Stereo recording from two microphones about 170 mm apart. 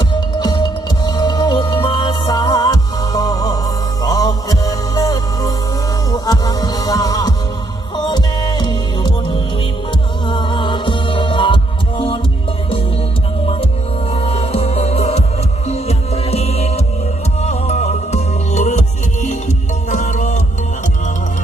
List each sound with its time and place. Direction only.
0.3 s music: 25° left (ahead or behind)
14.1 s music: 35° left (ahead or behind)